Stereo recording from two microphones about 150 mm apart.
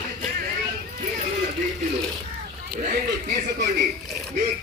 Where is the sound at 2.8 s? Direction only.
80° right.